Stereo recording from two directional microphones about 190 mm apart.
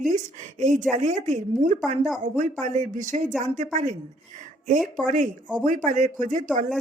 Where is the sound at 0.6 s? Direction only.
40° right (ahead or behind).